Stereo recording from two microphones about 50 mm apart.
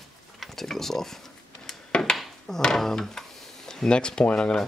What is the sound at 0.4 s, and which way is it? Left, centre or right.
Speech, centre.